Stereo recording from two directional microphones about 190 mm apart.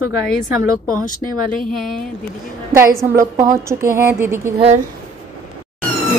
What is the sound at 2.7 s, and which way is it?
Speech, 15° right (ahead or behind).